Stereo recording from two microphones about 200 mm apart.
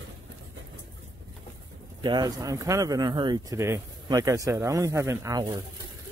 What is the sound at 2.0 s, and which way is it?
Speech, 20° right (ahead or behind).